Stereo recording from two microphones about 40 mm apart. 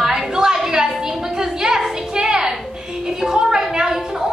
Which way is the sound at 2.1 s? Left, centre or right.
Centre.